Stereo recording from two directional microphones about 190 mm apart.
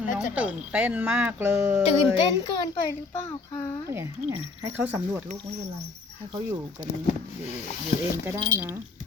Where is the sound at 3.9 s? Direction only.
15° right (ahead or behind).